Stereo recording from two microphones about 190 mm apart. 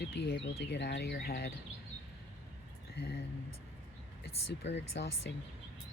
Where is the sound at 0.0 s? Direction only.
60° left (ahead or behind).